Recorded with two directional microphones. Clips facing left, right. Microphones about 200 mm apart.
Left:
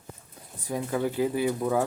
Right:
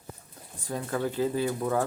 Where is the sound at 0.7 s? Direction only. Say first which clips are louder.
Left 2 dB; 15° left (ahead or behind).